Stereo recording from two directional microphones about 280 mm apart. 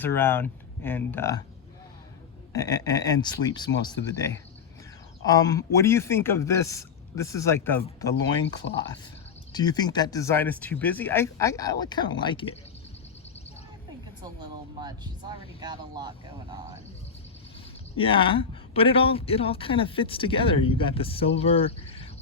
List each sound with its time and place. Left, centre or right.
0.0 s speech: centre
2.5 s speech: centre
5.2 s speech: centre
8.6 s speech: left
9.5 s speech: centre
14.8 s speech: centre
17.9 s speech: centre